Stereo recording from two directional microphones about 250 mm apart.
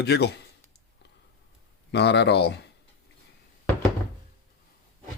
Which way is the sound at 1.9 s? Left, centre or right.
Left.